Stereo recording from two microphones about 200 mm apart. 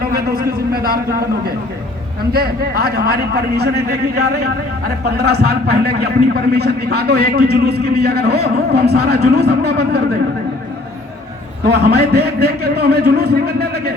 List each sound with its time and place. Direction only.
0.1 s a man's voice: 50° right (ahead or behind)
2.3 s a man's voice: 50° right (ahead or behind)
5.0 s a man's voice: 55° right (ahead or behind)
11.6 s a man's voice: 55° right (ahead or behind)